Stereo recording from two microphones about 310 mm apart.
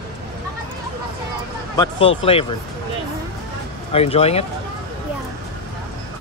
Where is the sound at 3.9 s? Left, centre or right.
Centre.